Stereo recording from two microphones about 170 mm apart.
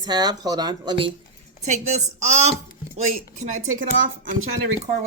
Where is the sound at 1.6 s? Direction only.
45° right (ahead or behind).